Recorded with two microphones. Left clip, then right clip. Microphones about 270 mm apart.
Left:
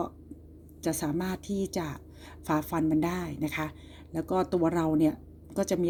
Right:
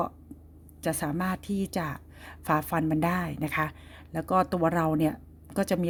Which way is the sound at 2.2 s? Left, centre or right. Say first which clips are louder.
Right 3 dB; right.